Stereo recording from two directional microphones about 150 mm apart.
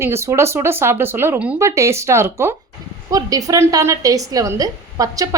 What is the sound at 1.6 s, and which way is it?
A woman's voice, 20° right (ahead or behind).